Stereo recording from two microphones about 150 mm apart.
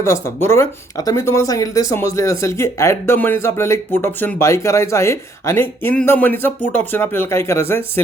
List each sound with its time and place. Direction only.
0.0 s speech: 20° left (ahead or behind)